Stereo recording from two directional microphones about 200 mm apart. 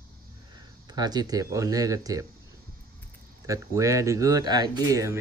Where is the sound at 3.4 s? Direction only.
15° right (ahead or behind).